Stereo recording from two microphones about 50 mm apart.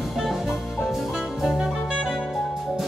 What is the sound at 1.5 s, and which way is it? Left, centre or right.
Music, centre.